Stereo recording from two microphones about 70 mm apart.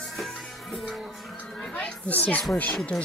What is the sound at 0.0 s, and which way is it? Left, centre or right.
Music, centre.